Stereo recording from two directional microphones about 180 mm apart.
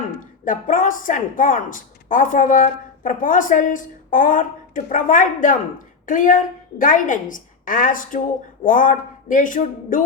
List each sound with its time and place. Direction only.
0.4 s speech: 50° left (ahead or behind)